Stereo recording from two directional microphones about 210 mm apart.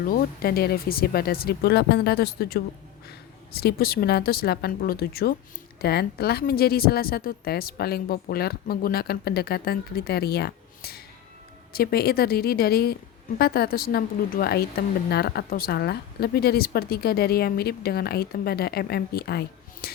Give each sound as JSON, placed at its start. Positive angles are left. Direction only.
{"t": 0.0, "sound": "a woman's voice", "side_deg": 45}